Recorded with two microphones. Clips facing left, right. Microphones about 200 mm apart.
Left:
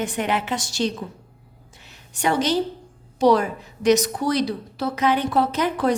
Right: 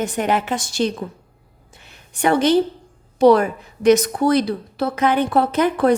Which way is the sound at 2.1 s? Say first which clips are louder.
Right 5 dB; 55° right (ahead or behind).